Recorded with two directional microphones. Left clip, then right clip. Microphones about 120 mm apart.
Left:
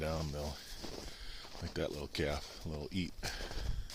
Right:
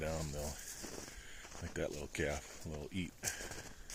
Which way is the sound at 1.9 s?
25° left (ahead or behind).